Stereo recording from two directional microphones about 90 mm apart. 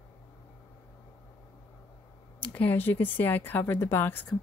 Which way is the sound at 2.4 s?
20° left (ahead or behind).